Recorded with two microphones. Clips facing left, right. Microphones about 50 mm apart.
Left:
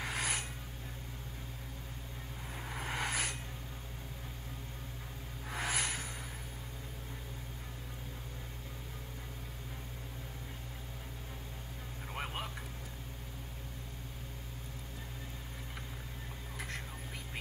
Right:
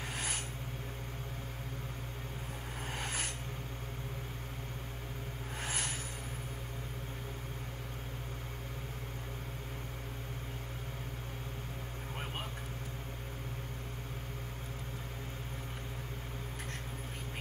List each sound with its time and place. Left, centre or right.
0.0 s filing: left
2.8 s vehicle: left
5.5 s a sound: left